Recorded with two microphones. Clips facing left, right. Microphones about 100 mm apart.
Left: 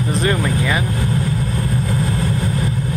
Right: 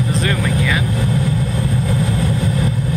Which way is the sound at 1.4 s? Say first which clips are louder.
Right 1 dB; centre (ahead or behind).